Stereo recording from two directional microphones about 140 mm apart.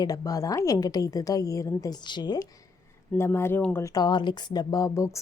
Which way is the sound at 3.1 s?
15° left (ahead or behind).